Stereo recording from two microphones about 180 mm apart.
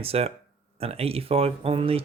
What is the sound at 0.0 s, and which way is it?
Speech, 35° right (ahead or behind).